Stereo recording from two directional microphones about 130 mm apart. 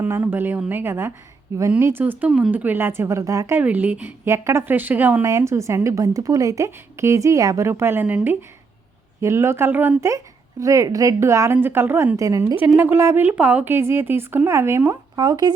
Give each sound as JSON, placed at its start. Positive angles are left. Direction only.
{"t": 0.0, "sound": "speech", "side_deg": -15}
{"t": 3.6, "sound": "a woman's voice", "side_deg": -10}
{"t": 15.1, "sound": "speech", "side_deg": -30}